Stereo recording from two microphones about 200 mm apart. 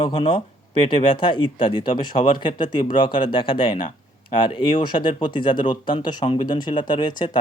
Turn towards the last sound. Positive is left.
turn(degrees=20)  # may be behind; listen again after turning